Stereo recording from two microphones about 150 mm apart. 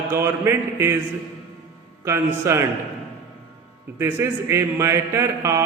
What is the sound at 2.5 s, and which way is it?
Speech, 20° right (ahead or behind).